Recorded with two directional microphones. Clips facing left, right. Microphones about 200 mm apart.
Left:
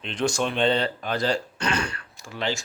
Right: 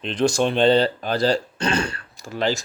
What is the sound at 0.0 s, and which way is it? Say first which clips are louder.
Speech: right 5 dB; 35° right (ahead or behind).